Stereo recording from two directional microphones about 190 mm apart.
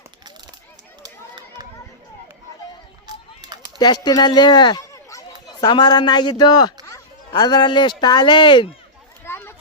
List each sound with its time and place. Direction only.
1.0 s run: 20° right (ahead or behind)
3.8 s speech: 20° left (ahead or behind)
9.2 s a sound: 10° left (ahead or behind)